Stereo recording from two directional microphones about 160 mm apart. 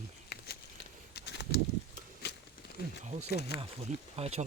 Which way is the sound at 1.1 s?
90° left.